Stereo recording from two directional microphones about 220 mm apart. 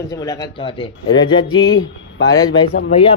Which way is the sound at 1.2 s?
20° left (ahead or behind).